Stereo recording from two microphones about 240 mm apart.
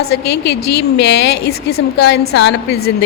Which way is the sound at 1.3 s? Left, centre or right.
Left.